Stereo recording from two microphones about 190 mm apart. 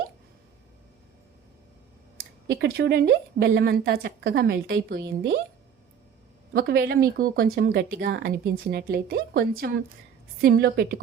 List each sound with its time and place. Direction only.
2.5 s a woman's voice: 65° right (ahead or behind)
6.5 s a woman's voice: 55° right (ahead or behind)